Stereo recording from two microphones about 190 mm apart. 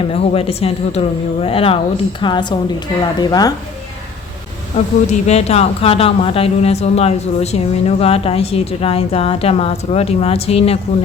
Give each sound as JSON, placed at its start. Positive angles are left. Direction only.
{"t": 0.0, "sound": "speech", "side_deg": 30}
{"t": 4.7, "sound": "speech", "side_deg": 35}